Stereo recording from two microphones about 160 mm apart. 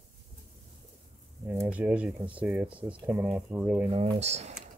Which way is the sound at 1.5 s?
10° right (ahead or behind).